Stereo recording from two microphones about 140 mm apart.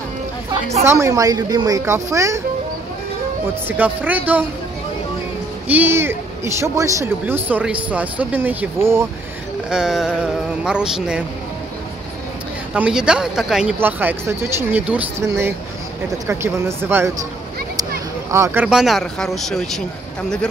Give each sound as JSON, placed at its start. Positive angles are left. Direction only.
{"t": 0.8, "sound": "a woman's voice", "side_deg": -20}
{"t": 3.6, "sound": "speech", "side_deg": -15}
{"t": 5.7, "sound": "speech", "side_deg": -15}
{"t": 9.7, "sound": "speech", "side_deg": -5}
{"t": 12.7, "sound": "speech", "side_deg": -5}
{"t": 13.7, "sound": "a woman's voice", "side_deg": -15}
{"t": 18.3, "sound": "speech", "side_deg": -15}
{"t": 18.7, "sound": "speech", "side_deg": 0}